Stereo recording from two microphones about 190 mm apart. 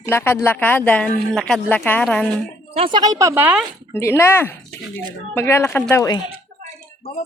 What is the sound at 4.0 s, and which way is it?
Speech, 15° left (ahead or behind).